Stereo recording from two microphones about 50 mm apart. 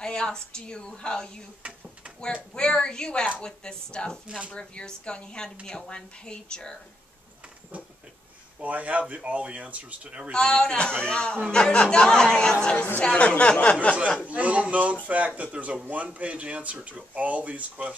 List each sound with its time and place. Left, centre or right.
0.0 s a woman's voice: centre
2.5 s a woman's voice: centre
7.7 s a sound: right
8.5 s speech: right
10.3 s a man's voice: centre
14.2 s speech: right